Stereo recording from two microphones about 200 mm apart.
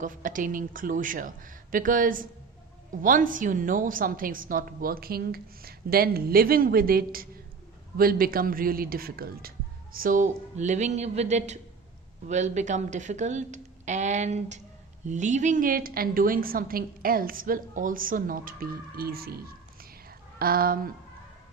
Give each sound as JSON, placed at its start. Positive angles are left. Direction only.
{"t": 0.0, "sound": "a woman's voice", "side_deg": -40}
{"t": 19.8, "sound": "whispering", "side_deg": -45}